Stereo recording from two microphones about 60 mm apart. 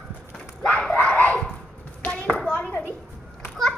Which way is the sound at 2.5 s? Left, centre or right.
Left.